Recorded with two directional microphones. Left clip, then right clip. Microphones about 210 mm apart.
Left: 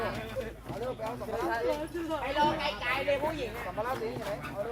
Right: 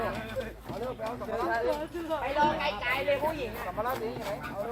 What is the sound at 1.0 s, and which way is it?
Speech, 25° left (ahead or behind).